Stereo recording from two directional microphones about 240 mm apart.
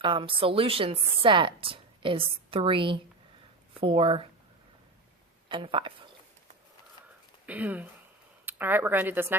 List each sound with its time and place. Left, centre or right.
0.0 s speech: right
5.5 s speech: right
7.4 s speech: centre